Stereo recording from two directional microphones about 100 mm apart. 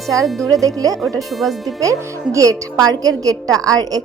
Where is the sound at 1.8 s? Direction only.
35° right (ahead or behind).